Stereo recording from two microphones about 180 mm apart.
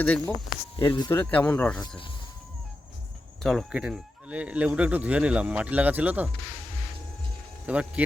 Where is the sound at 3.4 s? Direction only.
Centre (ahead or behind).